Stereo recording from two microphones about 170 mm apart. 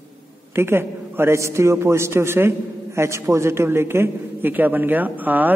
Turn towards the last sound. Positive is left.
turn(degrees=-10)  # may be behind; listen again after turning